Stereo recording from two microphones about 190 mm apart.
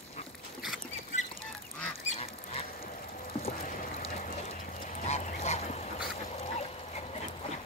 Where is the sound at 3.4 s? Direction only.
35° left (ahead or behind).